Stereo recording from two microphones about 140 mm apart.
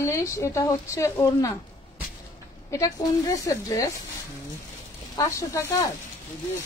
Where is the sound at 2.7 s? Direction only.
25° left (ahead or behind).